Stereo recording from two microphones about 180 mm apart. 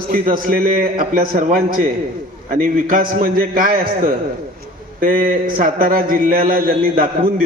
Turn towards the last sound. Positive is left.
turn(degrees=-55)  # may be behind; listen again after turning